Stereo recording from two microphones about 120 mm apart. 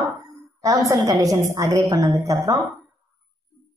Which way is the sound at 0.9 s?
30° right (ahead or behind).